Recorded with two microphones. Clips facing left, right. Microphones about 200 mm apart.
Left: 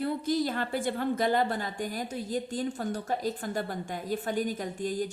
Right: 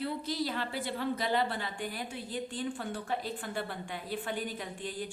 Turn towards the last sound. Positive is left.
turn(degrees=45)  # may be behind; listen again after turning